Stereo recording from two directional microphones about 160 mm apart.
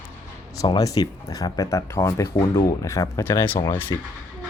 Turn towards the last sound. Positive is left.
turn(degrees=20)  # may be behind; listen again after turning